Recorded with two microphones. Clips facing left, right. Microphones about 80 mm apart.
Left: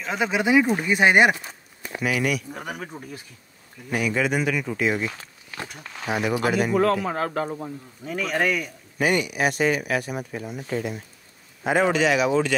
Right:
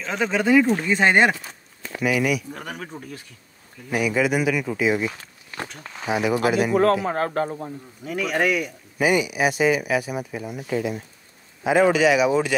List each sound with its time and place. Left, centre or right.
0.0 s speech: centre
3.9 s speech: centre
6.7 s speech: right
8.0 s speech: centre